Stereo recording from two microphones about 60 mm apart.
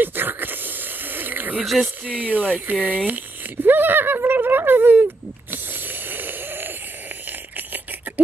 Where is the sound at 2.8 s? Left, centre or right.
Right.